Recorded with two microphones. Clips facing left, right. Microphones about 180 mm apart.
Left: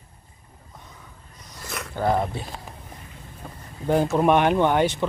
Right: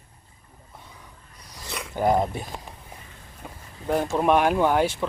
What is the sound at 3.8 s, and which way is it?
Speech, centre (ahead or behind).